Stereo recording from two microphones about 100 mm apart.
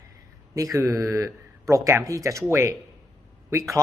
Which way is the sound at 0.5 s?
35° right (ahead or behind).